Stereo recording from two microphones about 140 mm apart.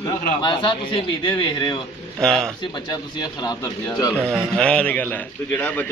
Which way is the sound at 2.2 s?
5° left (ahead or behind).